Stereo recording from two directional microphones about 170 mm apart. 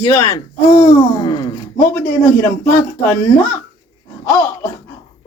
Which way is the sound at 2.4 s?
10° left (ahead or behind).